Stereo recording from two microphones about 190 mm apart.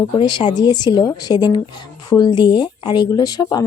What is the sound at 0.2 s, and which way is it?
Speech, 25° left (ahead or behind).